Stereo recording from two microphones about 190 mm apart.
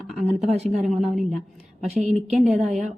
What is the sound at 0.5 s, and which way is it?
Speech, 35° right (ahead or behind).